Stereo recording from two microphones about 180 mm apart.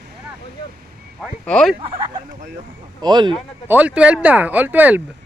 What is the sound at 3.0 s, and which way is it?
Speech, 25° right (ahead or behind).